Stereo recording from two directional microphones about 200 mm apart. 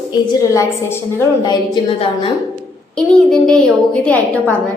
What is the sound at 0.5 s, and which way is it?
A woman's voice, 15° left (ahead or behind).